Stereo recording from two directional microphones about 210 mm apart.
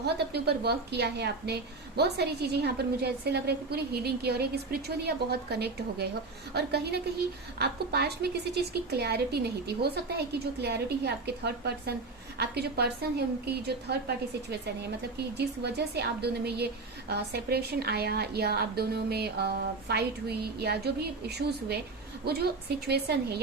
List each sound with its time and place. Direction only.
0.0 s a woman's voice: 50° right (ahead or behind)
15.4 s a woman's voice: 50° right (ahead or behind)